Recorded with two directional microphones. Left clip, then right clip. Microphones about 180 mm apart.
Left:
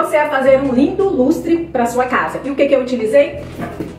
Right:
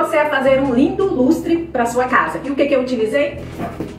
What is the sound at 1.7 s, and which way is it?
A woman's voice, 5° left (ahead or behind).